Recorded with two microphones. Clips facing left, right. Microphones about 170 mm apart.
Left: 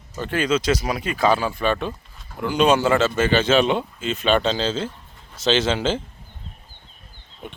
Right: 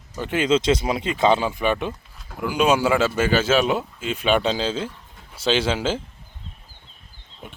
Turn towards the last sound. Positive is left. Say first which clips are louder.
# left 1 dB
turn(degrees=-10)  # may be behind; listen again after turning